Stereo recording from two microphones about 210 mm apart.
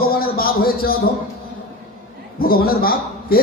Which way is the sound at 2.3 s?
45° left (ahead or behind).